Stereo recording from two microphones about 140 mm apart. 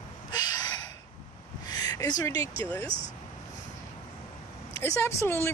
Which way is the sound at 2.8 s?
40° right (ahead or behind).